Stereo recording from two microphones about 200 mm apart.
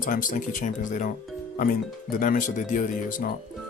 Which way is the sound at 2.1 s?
40° left (ahead or behind).